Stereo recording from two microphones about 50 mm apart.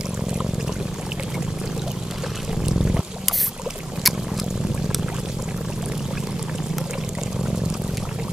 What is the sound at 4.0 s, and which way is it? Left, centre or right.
Boat, centre.